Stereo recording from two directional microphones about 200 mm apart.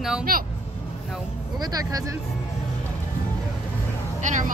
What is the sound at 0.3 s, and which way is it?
Speech, 45° right (ahead or behind).